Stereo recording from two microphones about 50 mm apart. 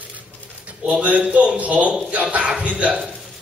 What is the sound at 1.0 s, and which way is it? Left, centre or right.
A man's voice, right.